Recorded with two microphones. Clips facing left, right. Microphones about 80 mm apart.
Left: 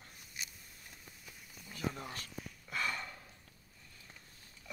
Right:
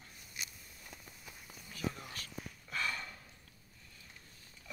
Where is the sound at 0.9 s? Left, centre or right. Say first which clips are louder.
Right 4 dB; right.